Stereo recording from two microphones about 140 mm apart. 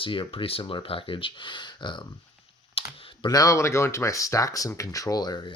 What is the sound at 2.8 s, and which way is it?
Computer keyboard, 45° left (ahead or behind).